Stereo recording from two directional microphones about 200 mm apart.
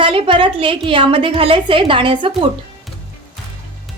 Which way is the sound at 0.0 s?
25° right (ahead or behind).